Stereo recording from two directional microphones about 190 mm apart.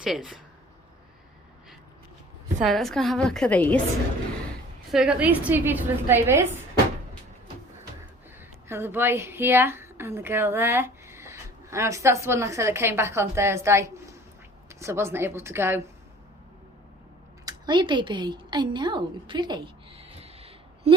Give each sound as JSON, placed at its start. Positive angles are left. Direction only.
{"t": 0.0, "sound": "a woman's voice", "side_deg": 0}
{"t": 2.6, "sound": "a woman's voice", "side_deg": 0}
{"t": 4.9, "sound": "a woman's voice", "side_deg": -5}
{"t": 8.4, "sound": "a woman's voice", "side_deg": -10}
{"t": 17.4, "sound": "a sound", "side_deg": -25}